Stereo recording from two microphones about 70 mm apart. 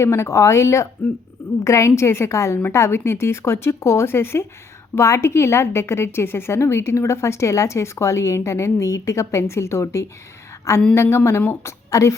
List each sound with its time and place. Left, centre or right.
0.0 s a woman's voice: left
11.9 s a woman's voice: left